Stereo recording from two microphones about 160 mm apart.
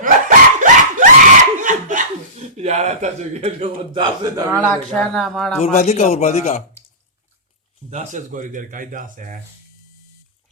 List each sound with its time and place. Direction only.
0.0 s dog: 55° right (ahead or behind)
1.6 s chuckle: 50° right (ahead or behind); by 4.4 s 25° right (ahead or behind)
4.5 s speech: centre (ahead or behind)
5.6 s speech: 45° left (ahead or behind)
7.9 s speech: 50° right (ahead or behind)